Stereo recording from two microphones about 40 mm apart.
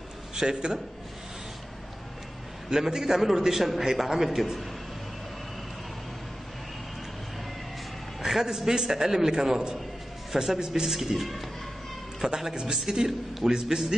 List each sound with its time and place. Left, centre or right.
0.3 s a man's voice: centre
2.7 s a man's voice: centre
8.3 s a man's voice: centre
12.4 s a man's voice: centre